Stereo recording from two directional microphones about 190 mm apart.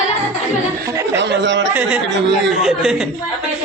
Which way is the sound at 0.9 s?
15° right (ahead or behind).